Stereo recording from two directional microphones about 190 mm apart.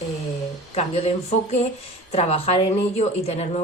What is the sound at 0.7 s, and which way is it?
Speech, 30° left (ahead or behind).